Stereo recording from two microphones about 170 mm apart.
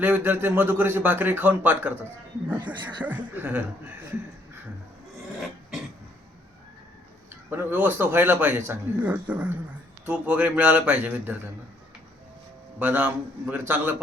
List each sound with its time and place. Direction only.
0.0 s speech: 10° right (ahead or behind)
7.5 s speech: 10° right (ahead or behind)
12.8 s speech: 10° right (ahead or behind)